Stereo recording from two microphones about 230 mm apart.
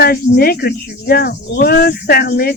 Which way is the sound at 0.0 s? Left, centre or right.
Left.